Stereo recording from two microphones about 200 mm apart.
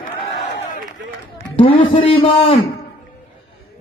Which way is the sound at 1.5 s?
25° left (ahead or behind).